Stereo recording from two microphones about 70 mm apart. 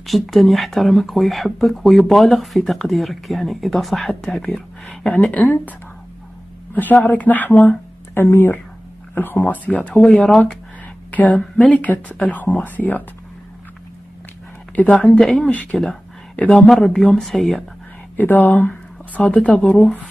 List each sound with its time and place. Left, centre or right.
0.0 s speech: centre
4.8 s speech: centre
9.5 s speech: centre
14.9 s speech: centre
15.1 s speech: centre
15.5 s speech: centre
16.6 s speech: centre
18.1 s speech: left